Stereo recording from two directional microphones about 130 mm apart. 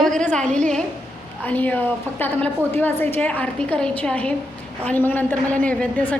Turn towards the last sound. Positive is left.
turn(degrees=10)  # may be behind; listen again after turning